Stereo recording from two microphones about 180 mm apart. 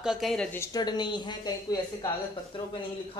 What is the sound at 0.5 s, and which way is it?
Speech, 20° left (ahead or behind).